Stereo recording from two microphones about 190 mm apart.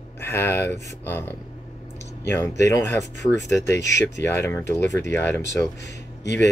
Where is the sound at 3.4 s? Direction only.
Centre (ahead or behind).